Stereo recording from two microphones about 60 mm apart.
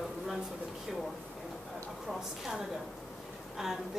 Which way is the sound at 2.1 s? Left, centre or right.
Centre.